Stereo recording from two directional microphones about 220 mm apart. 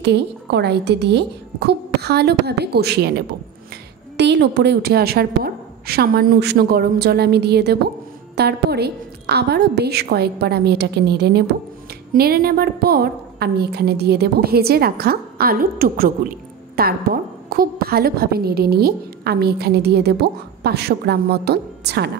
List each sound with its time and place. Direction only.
0.0 s a woman's voice: 50° right (ahead or behind)